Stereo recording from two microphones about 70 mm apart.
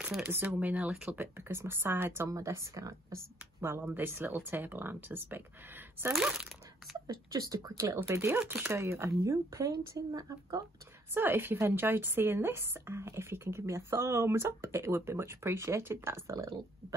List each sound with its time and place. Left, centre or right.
0.3 s speech: right
2.2 s speech: right
3.6 s speech: right
7.1 s speech: right
11.1 s speech: right